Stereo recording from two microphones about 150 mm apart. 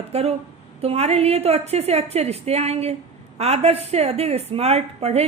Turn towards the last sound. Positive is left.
turn(degrees=-45)  # may be behind; listen again after turning